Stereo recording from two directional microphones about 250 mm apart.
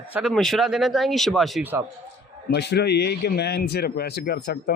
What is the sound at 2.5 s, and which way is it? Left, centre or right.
Speech, left.